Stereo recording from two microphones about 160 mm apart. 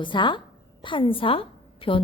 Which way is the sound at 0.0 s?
30° left (ahead or behind).